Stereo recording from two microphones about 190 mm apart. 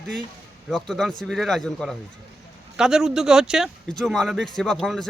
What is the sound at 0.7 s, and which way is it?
Speech, centre (ahead or behind).